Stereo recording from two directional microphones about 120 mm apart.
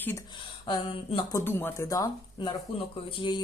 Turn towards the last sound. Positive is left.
turn(degrees=40)  # may be behind; listen again after turning